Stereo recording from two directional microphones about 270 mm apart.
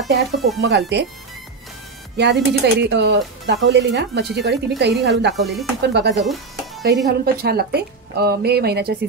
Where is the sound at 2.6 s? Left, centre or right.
Right.